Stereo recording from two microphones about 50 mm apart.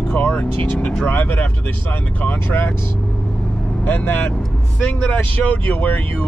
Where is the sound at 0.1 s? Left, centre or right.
Left.